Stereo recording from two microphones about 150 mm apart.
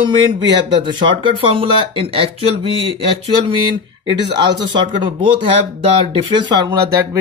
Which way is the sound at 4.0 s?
30° right (ahead or behind).